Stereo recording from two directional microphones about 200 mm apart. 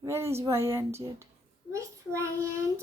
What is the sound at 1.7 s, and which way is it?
Child singing, 15° right (ahead or behind).